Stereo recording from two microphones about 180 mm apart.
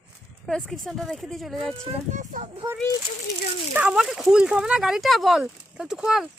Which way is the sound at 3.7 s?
5° right (ahead or behind).